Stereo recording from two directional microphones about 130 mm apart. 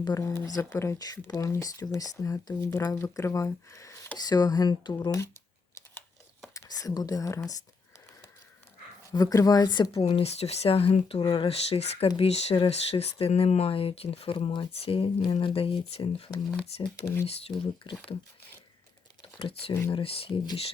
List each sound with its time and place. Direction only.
0.0 s speech: 25° left (ahead or behind)
6.5 s speech: 25° left (ahead or behind)
9.0 s speech: 25° left (ahead or behind)
9.9 s speech: 50° left (ahead or behind)
17.5 s speech: 35° left (ahead or behind)
19.2 s speech: 45° left (ahead or behind)